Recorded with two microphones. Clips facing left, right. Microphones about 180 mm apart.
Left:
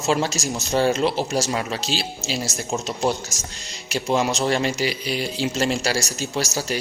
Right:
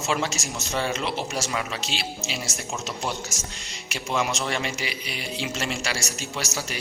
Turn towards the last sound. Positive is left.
turn(degrees=40)  # may be behind; listen again after turning